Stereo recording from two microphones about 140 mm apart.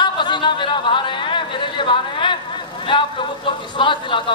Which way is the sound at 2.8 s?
35° left (ahead or behind).